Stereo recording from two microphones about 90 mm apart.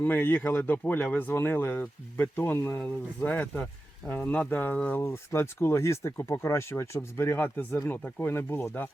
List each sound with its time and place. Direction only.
0.0 s speech: 25° left (ahead or behind)